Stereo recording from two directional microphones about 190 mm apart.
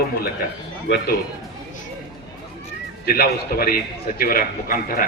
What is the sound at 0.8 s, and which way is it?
Speech, 65° left (ahead or behind).